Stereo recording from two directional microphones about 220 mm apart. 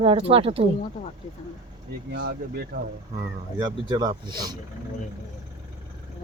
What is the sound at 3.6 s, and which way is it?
Speech, 20° right (ahead or behind).